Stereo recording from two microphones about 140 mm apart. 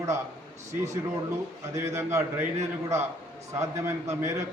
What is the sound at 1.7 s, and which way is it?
A man's voice, 20° right (ahead or behind).